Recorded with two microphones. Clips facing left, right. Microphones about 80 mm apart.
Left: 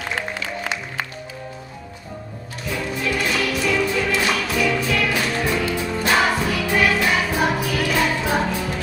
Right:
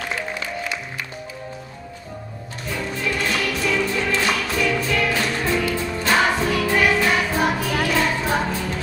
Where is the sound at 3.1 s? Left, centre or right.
Centre.